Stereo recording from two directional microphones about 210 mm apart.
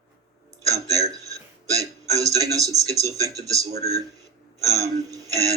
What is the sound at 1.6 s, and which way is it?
Speech, 15° right (ahead or behind).